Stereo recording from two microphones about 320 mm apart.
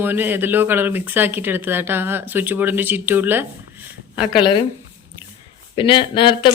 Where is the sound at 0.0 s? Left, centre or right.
Centre.